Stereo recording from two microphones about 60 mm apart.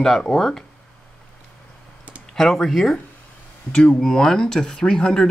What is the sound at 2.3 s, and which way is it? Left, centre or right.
Speech, centre.